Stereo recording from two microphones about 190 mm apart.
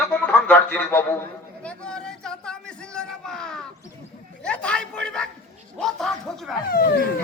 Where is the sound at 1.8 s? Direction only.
5° left (ahead or behind).